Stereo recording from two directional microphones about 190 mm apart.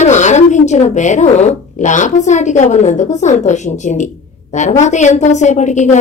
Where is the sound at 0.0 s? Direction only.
40° left (ahead or behind).